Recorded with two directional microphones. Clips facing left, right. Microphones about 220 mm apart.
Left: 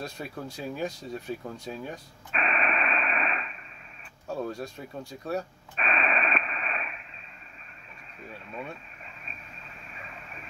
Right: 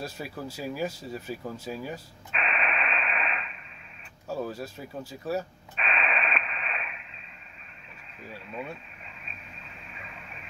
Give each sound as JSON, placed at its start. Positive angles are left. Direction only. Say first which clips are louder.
{"t": 0.0, "sound": "speech", "louder": "right 1 dB", "side_deg": -5}
{"t": 2.3, "sound": "radio", "louder": "left 2 dB", "side_deg": 45}
{"t": 4.3, "sound": "speech", "louder": "even", "side_deg": -5}
{"t": 5.8, "sound": "radio", "louder": "left 2 dB", "side_deg": 45}
{"t": 8.2, "sound": "speech", "louder": "right 1 dB", "side_deg": 0}
{"t": 9.9, "sound": "a sound", "louder": "left 2 dB", "side_deg": 40}